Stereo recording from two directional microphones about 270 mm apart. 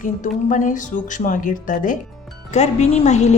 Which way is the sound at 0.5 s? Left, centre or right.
Left.